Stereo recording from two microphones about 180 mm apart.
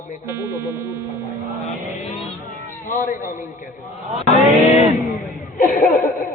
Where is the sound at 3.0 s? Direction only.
45° left (ahead or behind).